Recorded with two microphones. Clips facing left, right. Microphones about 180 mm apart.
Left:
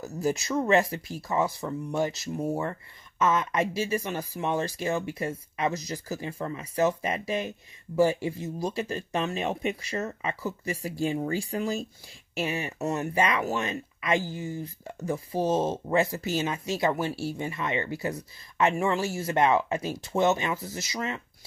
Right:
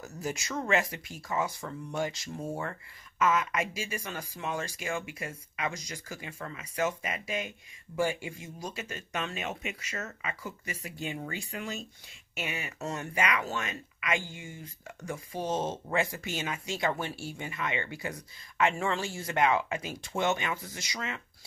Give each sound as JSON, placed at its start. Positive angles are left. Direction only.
{"t": 0.0, "sound": "speech", "side_deg": 35}
{"t": 3.6, "sound": "speech", "side_deg": 30}
{"t": 6.1, "sound": "speech", "side_deg": 35}